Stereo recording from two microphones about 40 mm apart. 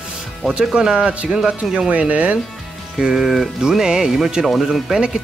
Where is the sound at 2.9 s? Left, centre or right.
Centre.